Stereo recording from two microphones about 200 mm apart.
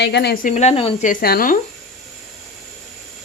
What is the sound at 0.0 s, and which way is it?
Speech, 55° left (ahead or behind).